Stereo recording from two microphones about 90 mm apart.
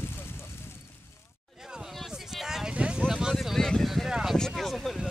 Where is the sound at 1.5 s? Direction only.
5° right (ahead or behind).